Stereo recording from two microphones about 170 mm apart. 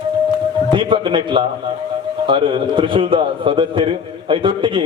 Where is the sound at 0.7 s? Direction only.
30° right (ahead or behind).